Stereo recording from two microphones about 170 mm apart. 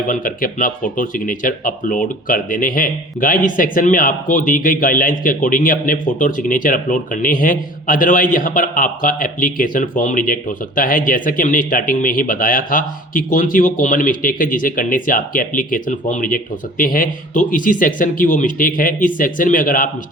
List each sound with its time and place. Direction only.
0.1 s speech: 55° left (ahead or behind)